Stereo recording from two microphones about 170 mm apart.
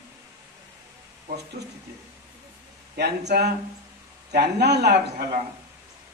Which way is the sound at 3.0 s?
75° right (ahead or behind).